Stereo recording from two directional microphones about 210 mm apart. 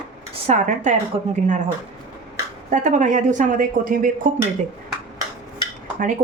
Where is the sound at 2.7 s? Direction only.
35° right (ahead or behind).